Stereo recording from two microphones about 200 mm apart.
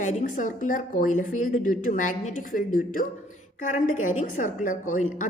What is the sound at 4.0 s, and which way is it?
Speech, 90° left.